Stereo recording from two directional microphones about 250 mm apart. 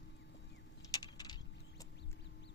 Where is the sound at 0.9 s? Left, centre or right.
Centre.